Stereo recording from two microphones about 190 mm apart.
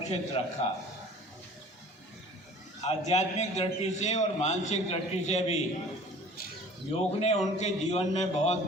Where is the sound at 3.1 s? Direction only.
35° left (ahead or behind).